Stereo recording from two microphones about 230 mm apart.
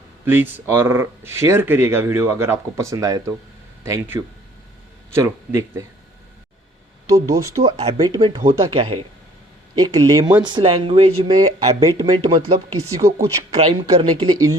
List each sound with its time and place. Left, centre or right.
0.3 s speech: centre
5.8 s speech: centre
7.1 s speech: centre
7.8 s speech: right